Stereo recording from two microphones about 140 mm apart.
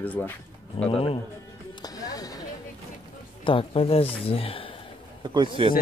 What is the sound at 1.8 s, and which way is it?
Music, 25° left (ahead or behind).